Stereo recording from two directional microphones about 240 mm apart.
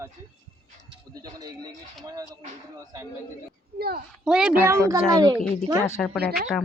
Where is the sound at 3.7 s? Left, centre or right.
Right.